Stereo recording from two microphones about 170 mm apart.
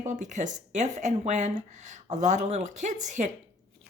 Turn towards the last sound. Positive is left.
turn(degrees=-45)  # may be behind; listen again after turning